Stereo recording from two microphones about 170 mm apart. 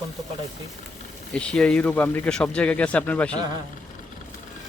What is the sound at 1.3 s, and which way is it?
Speech, 5° left (ahead or behind).